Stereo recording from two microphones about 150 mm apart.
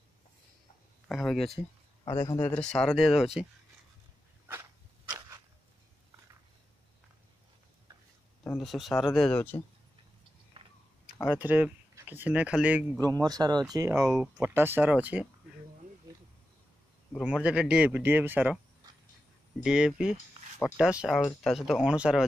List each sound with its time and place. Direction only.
1.0 s speech: centre (ahead or behind)
2.1 s speech: 20° left (ahead or behind)
2.7 s speech: 5° left (ahead or behind)
8.5 s speech: centre (ahead or behind)
10.6 s a sound: 40° right (ahead or behind)
11.3 s speech: 10° right (ahead or behind)
13.2 s speech: 25° right (ahead or behind); by 15.2 s 10° right (ahead or behind)
17.2 s speech: 10° right (ahead or behind)
19.6 s speech: 5° right (ahead or behind)